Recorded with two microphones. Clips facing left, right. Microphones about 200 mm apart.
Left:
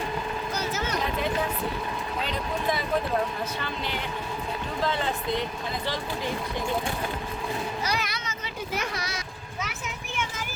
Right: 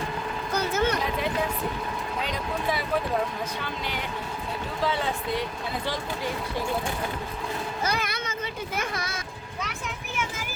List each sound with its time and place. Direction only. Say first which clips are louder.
0.5 s a sound: right 8 dB; 55° right (ahead or behind)
2.2 s speech: left 1 dB; 10° right (ahead or behind)
4.8 s speech: right 1 dB; 10° right (ahead or behind)
7.9 s children playing: right 2 dB; 55° right (ahead or behind)